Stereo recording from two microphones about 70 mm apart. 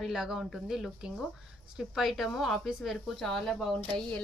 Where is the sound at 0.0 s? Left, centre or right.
Centre.